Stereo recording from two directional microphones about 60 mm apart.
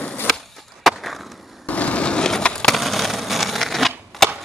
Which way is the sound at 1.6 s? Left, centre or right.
Left.